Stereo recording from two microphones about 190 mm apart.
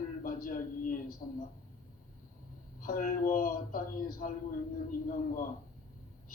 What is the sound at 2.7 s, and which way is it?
A man's voice, 45° left (ahead or behind).